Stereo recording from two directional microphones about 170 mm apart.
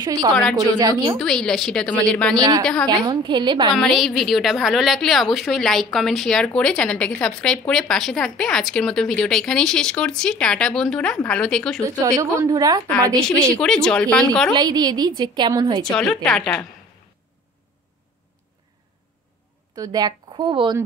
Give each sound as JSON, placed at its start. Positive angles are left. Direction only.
{"t": 0.0, "sound": "a woman's voice", "side_deg": -20}
{"t": 0.3, "sound": "a woman's voice", "side_deg": 5}
{"t": 0.6, "sound": "a woman's voice", "side_deg": -25}
{"t": 1.1, "sound": "a woman's voice", "side_deg": 5}
{"t": 3.1, "sound": "a woman's voice", "side_deg": -25}
{"t": 3.7, "sound": "a woman's voice", "side_deg": 0}
{"t": 11.8, "sound": "a woman's voice", "side_deg": -20}
{"t": 13.6, "sound": "a woman's voice", "side_deg": 5}
{"t": 14.5, "sound": "a woman's voice", "side_deg": -25}
{"t": 15.8, "sound": "a woman's voice", "side_deg": 5}
{"t": 19.7, "sound": "a woman's voice", "side_deg": -20}